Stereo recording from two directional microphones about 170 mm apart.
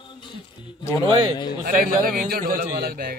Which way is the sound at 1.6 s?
55° right (ahead or behind).